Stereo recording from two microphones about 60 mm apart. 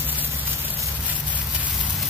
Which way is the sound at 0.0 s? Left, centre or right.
Right.